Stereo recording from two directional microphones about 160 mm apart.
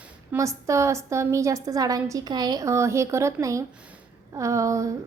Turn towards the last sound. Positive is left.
turn(degrees=-20)  # may be behind; listen again after turning